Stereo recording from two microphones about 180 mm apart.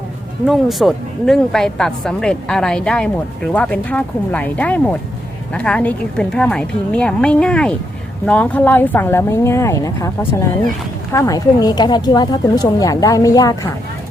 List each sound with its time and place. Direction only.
0.4 s a woman's voice: centre (ahead or behind); by 10.1 s 15° left (ahead or behind)
11.1 s a woman's voice: 20° left (ahead or behind)